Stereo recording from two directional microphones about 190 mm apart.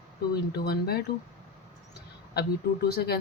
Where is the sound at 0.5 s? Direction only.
55° left (ahead or behind).